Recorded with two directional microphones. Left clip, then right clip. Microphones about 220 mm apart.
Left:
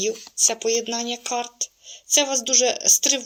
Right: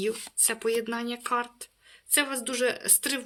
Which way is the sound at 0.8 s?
20° right (ahead or behind).